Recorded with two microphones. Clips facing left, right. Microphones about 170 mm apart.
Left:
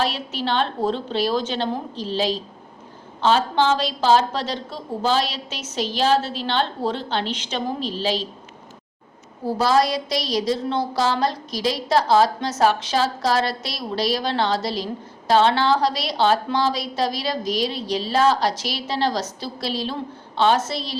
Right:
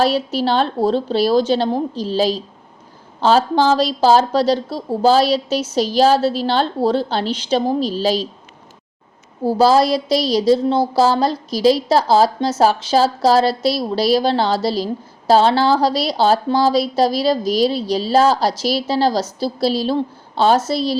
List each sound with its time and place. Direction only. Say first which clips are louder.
0.0 s a woman's voice: right 8 dB; 35° right (ahead or behind)
9.4 s a woman's voice: right 6 dB; 30° right (ahead or behind)